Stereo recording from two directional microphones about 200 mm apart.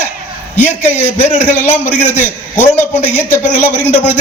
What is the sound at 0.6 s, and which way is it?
A man's voice, 10° left (ahead or behind).